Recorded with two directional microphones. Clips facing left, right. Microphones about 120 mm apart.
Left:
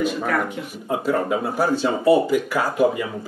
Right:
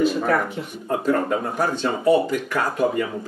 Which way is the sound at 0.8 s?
5° left (ahead or behind).